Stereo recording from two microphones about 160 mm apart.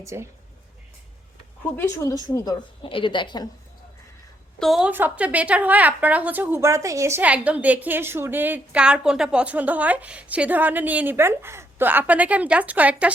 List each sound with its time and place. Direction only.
0.0 s speech: 20° right (ahead or behind)
1.6 s a woman's voice: 15° left (ahead or behind); by 3.4 s 30° left (ahead or behind)
4.6 s a woman's voice: 5° right (ahead or behind)